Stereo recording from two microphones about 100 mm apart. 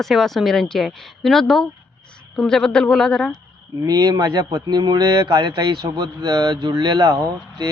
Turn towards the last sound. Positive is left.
turn(degrees=-40)  # may be behind; listen again after turning